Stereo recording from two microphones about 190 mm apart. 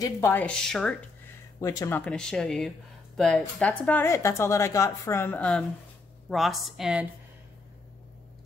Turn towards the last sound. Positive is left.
turn(degrees=0)  # may be behind; listen again after turning